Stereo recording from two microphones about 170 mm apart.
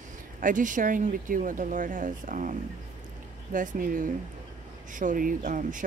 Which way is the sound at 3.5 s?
50° right (ahead or behind).